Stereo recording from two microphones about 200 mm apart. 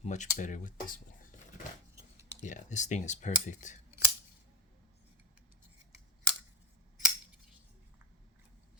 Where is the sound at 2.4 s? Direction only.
35° left (ahead or behind).